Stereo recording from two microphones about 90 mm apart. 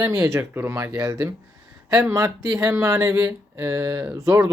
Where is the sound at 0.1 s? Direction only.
35° right (ahead or behind).